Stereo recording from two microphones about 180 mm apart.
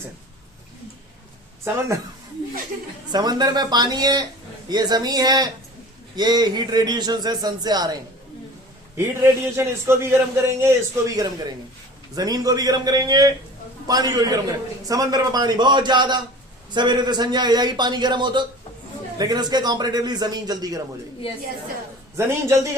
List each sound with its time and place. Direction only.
3.1 s a man's voice: 25° right (ahead or behind)
9.0 s a man's voice: 15° right (ahead or behind)
21.2 s a woman's voice: 30° left (ahead or behind)
22.4 s a man's voice: 15° right (ahead or behind)